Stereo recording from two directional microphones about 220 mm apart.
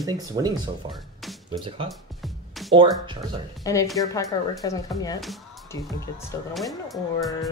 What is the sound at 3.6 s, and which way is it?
A woman's voice, 15° left (ahead or behind).